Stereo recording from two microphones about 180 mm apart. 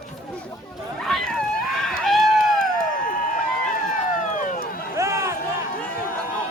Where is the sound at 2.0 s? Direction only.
Centre (ahead or behind).